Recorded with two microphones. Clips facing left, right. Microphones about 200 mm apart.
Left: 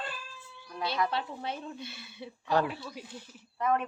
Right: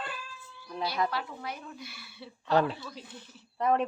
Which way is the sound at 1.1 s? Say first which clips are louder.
Left 2 dB; 25° left (ahead or behind).